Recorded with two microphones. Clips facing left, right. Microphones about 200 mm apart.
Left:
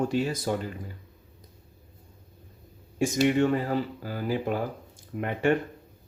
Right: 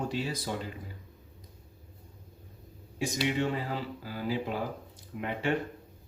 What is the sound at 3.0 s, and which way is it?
Speech, 50° left (ahead or behind).